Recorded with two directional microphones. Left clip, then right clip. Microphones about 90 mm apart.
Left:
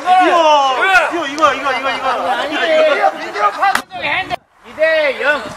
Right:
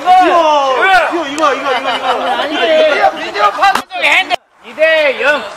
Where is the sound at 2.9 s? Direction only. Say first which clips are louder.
Right 3 dB; 30° right (ahead or behind).